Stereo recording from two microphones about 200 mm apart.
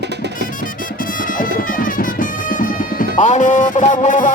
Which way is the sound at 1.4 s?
45° left (ahead or behind).